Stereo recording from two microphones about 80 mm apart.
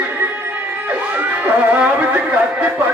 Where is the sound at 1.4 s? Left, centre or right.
Centre.